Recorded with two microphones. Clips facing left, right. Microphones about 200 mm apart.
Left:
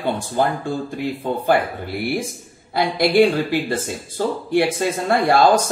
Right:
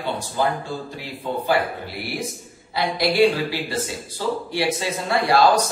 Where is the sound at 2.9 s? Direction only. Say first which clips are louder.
Left 3 dB; 50° left (ahead or behind).